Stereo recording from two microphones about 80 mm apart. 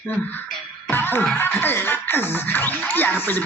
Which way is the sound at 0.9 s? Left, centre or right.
Left.